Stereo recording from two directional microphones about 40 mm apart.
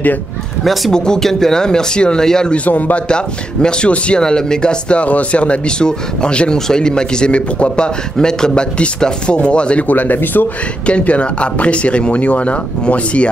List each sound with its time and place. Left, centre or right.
0.9 s speech: centre
2.5 s speech: left
3.1 s speech: left
8.7 s speech: left
9.8 s speech: left
10.9 s speech: left